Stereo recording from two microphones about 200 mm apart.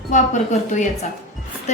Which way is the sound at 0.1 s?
40° left (ahead or behind).